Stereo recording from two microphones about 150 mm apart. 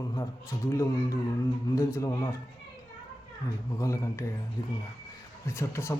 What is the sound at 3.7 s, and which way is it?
Speech, 20° left (ahead or behind).